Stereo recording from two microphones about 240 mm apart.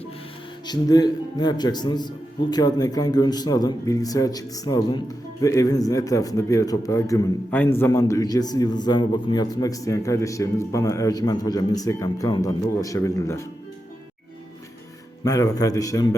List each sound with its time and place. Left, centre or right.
0.7 s a man's voice: centre
15.2 s a man's voice: centre